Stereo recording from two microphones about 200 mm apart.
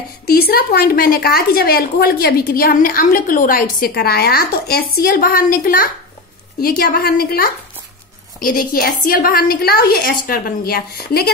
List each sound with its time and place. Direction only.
0.3 s a woman's voice: 50° left (ahead or behind)